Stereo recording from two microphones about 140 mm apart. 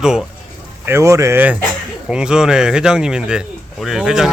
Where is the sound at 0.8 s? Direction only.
20° right (ahead or behind).